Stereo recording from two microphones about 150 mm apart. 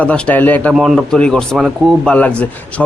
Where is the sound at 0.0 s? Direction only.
10° left (ahead or behind).